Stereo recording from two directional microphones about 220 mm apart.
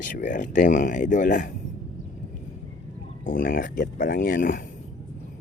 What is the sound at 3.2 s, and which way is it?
Speech, 40° left (ahead or behind).